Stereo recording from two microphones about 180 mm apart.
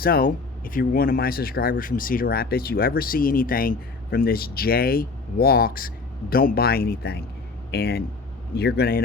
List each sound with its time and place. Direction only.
0.0 s speech: 55° left (ahead or behind)